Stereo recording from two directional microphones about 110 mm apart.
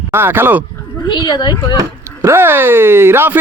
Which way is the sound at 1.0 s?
45° left (ahead or behind).